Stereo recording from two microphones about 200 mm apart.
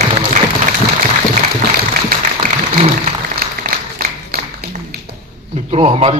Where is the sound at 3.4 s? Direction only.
45° right (ahead or behind).